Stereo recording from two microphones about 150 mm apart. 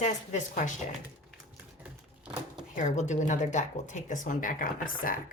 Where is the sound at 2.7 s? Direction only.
55° left (ahead or behind).